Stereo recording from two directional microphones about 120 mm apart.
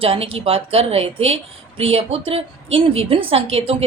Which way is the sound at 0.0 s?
55° right (ahead or behind).